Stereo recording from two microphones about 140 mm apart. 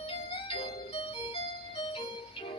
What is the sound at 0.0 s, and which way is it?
Music, 40° left (ahead or behind).